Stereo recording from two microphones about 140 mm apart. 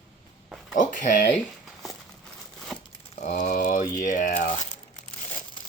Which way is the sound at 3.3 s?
80° left.